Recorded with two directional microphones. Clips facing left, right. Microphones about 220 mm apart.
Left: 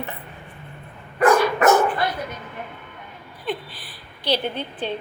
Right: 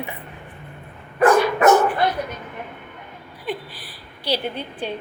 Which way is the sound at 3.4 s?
10° right (ahead or behind).